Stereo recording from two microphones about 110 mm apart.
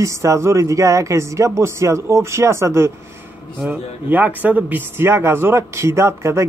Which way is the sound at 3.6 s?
15° right (ahead or behind).